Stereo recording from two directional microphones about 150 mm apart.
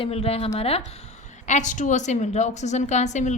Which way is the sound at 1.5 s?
55° left (ahead or behind).